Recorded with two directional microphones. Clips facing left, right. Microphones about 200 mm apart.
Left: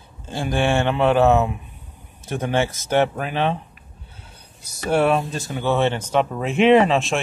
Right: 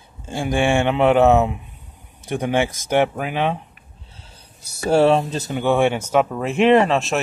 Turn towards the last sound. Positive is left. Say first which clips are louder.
# even
turn(degrees=0)  # may be behind; listen again after turning